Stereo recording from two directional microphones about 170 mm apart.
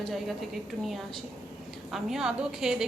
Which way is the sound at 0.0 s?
Centre (ahead or behind).